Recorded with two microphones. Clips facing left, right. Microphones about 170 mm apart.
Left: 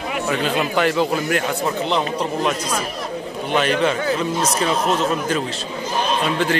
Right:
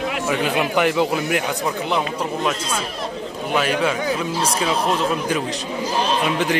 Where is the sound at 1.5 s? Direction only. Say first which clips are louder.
Left 1 dB; centre (ahead or behind).